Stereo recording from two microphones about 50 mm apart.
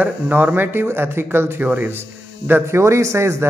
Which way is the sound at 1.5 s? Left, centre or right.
Right.